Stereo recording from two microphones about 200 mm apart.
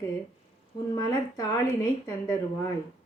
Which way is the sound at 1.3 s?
15° left (ahead or behind).